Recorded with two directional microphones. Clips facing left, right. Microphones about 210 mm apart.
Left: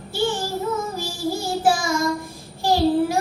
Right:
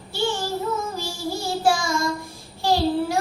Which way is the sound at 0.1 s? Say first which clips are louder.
Left 2 dB; 15° left (ahead or behind).